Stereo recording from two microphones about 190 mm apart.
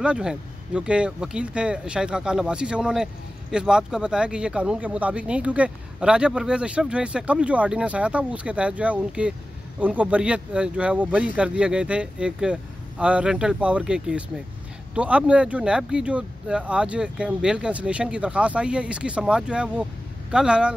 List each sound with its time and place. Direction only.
0.0 s speech: 5° right (ahead or behind)